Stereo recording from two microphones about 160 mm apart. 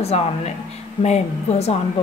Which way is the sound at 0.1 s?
40° left (ahead or behind).